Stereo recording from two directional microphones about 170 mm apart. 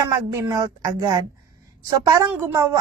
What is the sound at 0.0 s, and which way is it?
A woman's voice, 20° right (ahead or behind).